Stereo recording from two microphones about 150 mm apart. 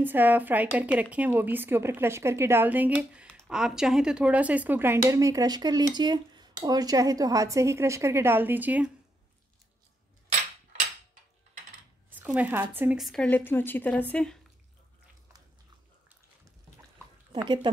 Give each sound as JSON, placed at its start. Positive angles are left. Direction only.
{"t": 0.0, "sound": "speech", "side_deg": -10}
{"t": 12.1, "sound": "speech", "side_deg": -10}
{"t": 13.0, "sound": "a woman's voice", "side_deg": 5}